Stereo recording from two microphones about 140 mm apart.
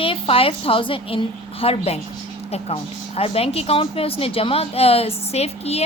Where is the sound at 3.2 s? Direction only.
45° left (ahead or behind).